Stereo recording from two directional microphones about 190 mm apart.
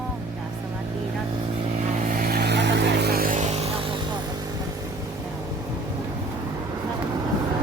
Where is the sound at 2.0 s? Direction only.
45° right (ahead or behind).